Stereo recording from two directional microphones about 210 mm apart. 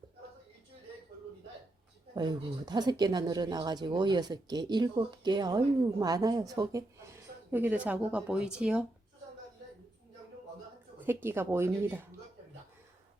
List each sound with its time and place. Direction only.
2.1 s speech: 20° right (ahead or behind); by 8.8 s 5° right (ahead or behind)
11.0 s speech: 10° right (ahead or behind)